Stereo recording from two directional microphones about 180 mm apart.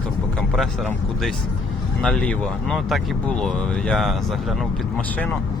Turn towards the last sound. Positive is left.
turn(degrees=10)  # may be behind; listen again after turning